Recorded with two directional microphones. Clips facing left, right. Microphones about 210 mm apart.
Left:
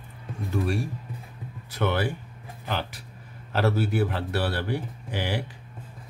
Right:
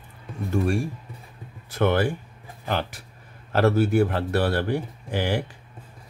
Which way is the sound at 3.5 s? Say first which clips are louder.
Right 5 dB; 50° right (ahead or behind).